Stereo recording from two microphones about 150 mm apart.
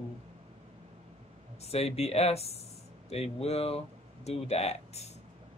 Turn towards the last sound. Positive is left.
turn(degrees=45)  # may be behind; listen again after turning